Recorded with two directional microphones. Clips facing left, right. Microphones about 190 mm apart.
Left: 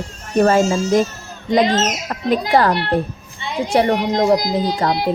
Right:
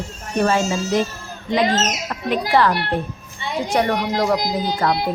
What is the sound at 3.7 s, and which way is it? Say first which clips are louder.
Speech: left 4 dB; 25° left (ahead or behind).